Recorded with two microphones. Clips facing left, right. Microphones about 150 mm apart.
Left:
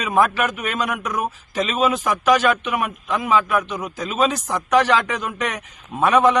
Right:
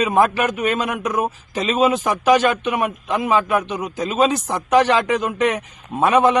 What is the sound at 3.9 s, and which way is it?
Speech, 30° right (ahead or behind).